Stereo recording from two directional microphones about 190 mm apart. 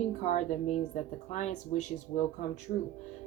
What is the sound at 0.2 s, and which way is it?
A woman's voice, 40° left (ahead or behind).